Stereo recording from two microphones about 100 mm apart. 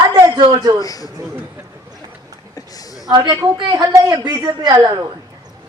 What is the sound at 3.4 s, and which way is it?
A woman's voice, 35° right (ahead or behind).